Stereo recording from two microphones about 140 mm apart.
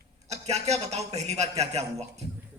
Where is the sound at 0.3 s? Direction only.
50° right (ahead or behind).